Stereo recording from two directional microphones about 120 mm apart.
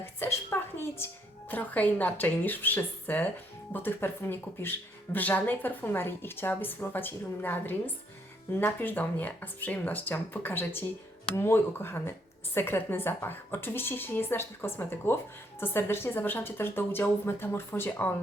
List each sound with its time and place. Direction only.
0.0 s a woman's voice: 20° left (ahead or behind)